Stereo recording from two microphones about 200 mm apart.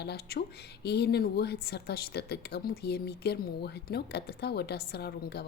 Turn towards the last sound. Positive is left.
turn(degrees=55)  # may be behind; listen again after turning